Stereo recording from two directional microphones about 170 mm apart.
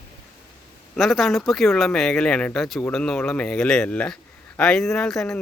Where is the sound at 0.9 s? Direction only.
Centre (ahead or behind).